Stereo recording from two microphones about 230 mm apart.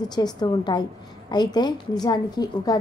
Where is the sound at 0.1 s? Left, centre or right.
Centre.